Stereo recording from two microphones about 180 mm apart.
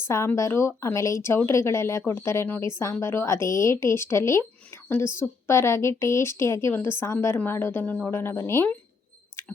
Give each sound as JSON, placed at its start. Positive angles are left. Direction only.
{"t": 0.1, "sound": "a woman's voice", "side_deg": 15}